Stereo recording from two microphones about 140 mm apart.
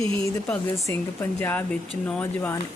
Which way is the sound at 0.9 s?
15° left (ahead or behind).